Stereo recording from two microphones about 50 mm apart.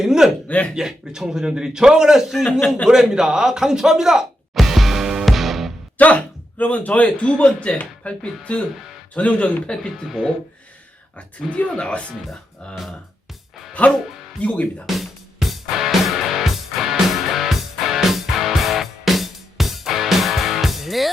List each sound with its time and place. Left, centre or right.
0.0 s a man's voice: centre
0.4 s speech: left
0.7 s a man's voice: centre
2.9 s music: centre
6.0 s speech: left
10.1 s speech: centre
11.2 s speech: left
12.7 s speech: centre
13.8 s speech: left
14.8 s music: centre